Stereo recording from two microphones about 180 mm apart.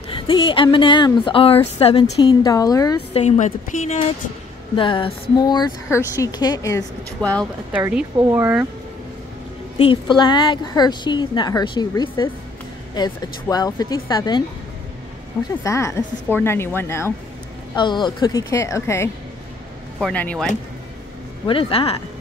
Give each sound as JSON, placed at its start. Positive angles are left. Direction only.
{"t": 0.1, "sound": "a woman's voice", "side_deg": 30}
{"t": 2.4, "sound": "a woman's voice", "side_deg": 20}
{"t": 3.1, "sound": "a woman's voice", "side_deg": 35}
{"t": 4.7, "sound": "a woman's voice", "side_deg": 30}
{"t": 7.2, "sound": "speech", "side_deg": 5}
{"t": 7.7, "sound": "speech", "side_deg": -10}
{"t": 9.8, "sound": "a woman's voice", "side_deg": 30}
{"t": 15.6, "sound": "a woman's voice", "side_deg": 15}
{"t": 17.7, "sound": "a woman's voice", "side_deg": 25}
{"t": 21.5, "sound": "a woman's voice", "side_deg": 30}